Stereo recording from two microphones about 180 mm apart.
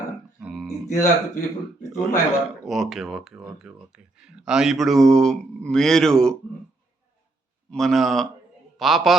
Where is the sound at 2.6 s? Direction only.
Centre (ahead or behind).